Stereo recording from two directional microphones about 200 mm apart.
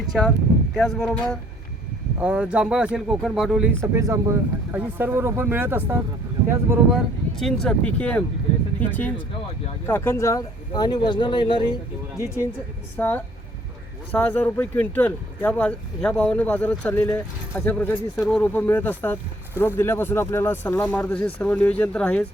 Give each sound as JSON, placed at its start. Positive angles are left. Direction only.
{"t": 0.1, "sound": "speech", "side_deg": 0}